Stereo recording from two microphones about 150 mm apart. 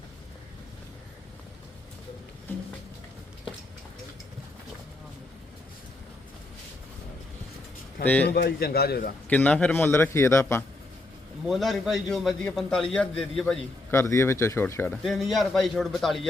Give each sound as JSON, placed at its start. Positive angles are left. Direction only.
{"t": 8.0, "sound": "a man's voice", "side_deg": 10}
{"t": 8.3, "sound": "a man's voice", "side_deg": 90}
{"t": 9.3, "sound": "a man's voice", "side_deg": 10}
{"t": 11.4, "sound": "a man's voice", "side_deg": 0}
{"t": 13.9, "sound": "a man's voice", "side_deg": 20}
{"t": 15.0, "sound": "a man's voice", "side_deg": 0}